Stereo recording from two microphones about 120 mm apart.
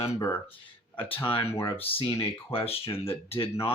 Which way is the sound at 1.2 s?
45° left (ahead or behind).